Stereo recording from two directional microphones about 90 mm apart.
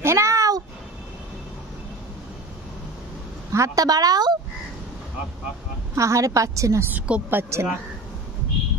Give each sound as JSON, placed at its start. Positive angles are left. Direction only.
{"t": 0.0, "sound": "meow", "side_deg": -35}
{"t": 3.5, "sound": "speech", "side_deg": -40}
{"t": 5.9, "sound": "a woman's voice", "side_deg": -35}
{"t": 6.9, "sound": "a woman's voice", "side_deg": -20}